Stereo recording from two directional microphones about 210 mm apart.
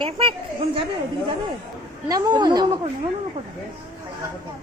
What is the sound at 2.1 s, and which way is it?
Speech, 20° right (ahead or behind).